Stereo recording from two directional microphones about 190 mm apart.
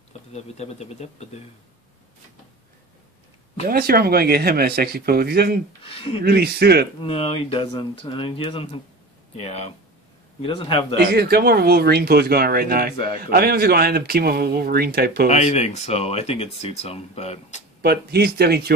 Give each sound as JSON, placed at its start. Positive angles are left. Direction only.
{"t": 0.3, "sound": "speech", "side_deg": 35}
{"t": 3.6, "sound": "speech", "side_deg": -50}
{"t": 5.9, "sound": "speech", "side_deg": 30}
{"t": 6.2, "sound": "speech", "side_deg": -55}
{"t": 7.0, "sound": "speech", "side_deg": 30}
{"t": 11.0, "sound": "speech", "side_deg": -55}
{"t": 15.2, "sound": "speech", "side_deg": 35}
{"t": 17.8, "sound": "speech", "side_deg": -55}